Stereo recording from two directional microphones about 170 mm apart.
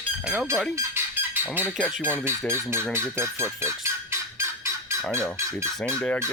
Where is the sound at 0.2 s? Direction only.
10° right (ahead or behind).